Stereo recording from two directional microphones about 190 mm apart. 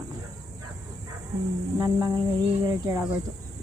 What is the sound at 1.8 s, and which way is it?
Speech, 20° right (ahead or behind).